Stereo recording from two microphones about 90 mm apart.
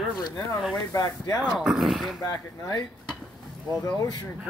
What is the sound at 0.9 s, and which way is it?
Speech, 45° left (ahead or behind).